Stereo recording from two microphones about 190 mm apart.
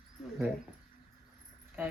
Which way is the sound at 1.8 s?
10° right (ahead or behind).